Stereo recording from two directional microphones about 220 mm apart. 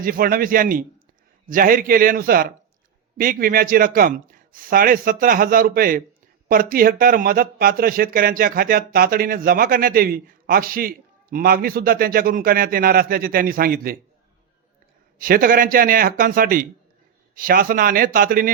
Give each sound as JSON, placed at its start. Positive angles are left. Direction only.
{"t": 0.0, "sound": "speech", "side_deg": -40}
{"t": 15.2, "sound": "speech", "side_deg": -40}